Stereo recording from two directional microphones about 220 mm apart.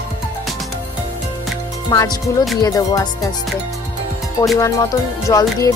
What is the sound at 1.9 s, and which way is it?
Music, 15° left (ahead or behind).